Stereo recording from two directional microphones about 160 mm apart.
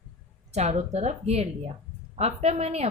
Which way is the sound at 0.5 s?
45° right (ahead or behind).